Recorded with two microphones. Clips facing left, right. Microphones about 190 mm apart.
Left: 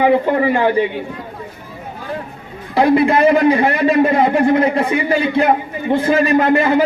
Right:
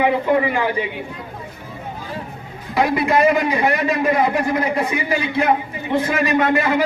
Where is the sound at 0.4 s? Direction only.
35° left (ahead or behind).